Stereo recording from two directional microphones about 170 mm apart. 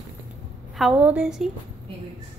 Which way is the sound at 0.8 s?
5° right (ahead or behind).